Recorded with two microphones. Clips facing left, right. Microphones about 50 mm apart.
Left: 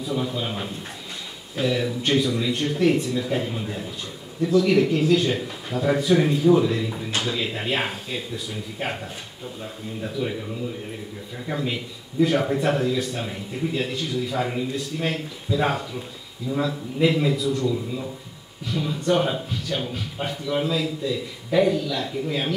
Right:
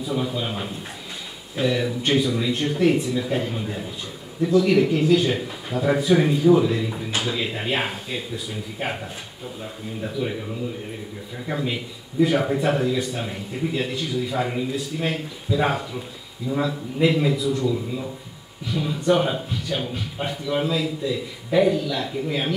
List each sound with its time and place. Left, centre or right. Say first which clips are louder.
0.0 s a man's voice: right 1 dB; centre
11.4 s a man's voice: right 1 dB; centre